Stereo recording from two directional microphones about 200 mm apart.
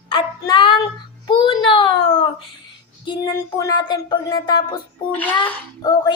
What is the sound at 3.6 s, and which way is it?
Speech, 20° left (ahead or behind).